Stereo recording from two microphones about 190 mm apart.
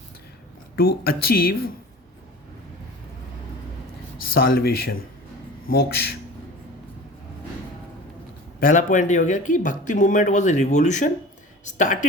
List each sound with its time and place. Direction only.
0.8 s speech: 55° left (ahead or behind)
4.2 s speech: 50° left (ahead or behind)
8.6 s speech: 40° left (ahead or behind)